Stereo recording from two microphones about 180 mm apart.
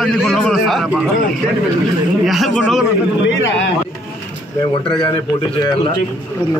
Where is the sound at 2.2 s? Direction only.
Centre (ahead or behind).